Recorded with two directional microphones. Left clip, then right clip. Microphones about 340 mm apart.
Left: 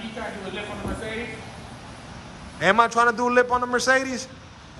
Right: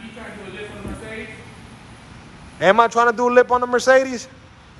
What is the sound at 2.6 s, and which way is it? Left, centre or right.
A man's voice, centre.